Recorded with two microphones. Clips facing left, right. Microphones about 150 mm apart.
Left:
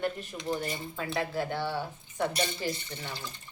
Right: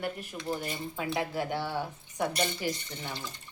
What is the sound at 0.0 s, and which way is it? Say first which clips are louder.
Speech: left 2 dB; 10° right (ahead or behind).